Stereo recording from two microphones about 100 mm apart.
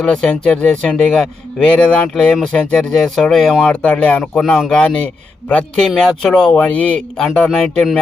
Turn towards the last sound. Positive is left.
turn(degrees=10)  # may be behind; listen again after turning